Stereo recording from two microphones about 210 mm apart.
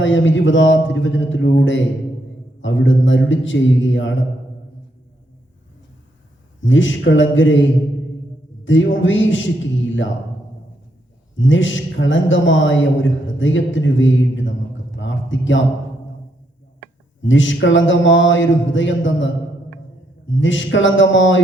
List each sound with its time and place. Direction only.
0.0 s a man's voice: 65° left (ahead or behind)
6.6 s a man's voice: 65° left (ahead or behind)
8.6 s a man's voice: 65° left (ahead or behind)
11.3 s a man's voice: 65° left (ahead or behind)
14.9 s a sound: 65° left (ahead or behind)
17.2 s a man's voice: 65° left (ahead or behind)